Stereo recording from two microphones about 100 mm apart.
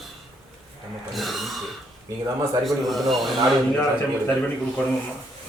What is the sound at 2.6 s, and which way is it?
Speech, centre (ahead or behind).